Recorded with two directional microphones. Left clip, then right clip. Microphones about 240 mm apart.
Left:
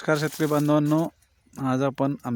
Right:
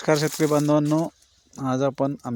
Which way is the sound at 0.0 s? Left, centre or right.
Centre.